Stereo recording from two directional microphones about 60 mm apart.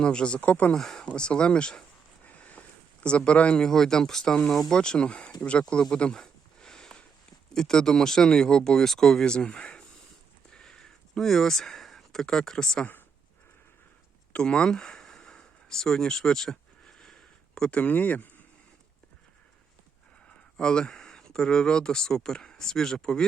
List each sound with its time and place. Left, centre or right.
0.0 s speech: centre
0.8 s speech: centre
1.1 s speech: centre
5.8 s a sound: centre
7.5 s speech: centre
10.5 s a sound: centre
14.3 s a sound: centre
17.7 s speech: left
20.6 s speech: centre